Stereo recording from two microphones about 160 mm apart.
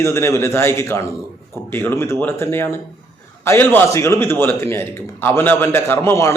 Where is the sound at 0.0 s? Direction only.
15° left (ahead or behind).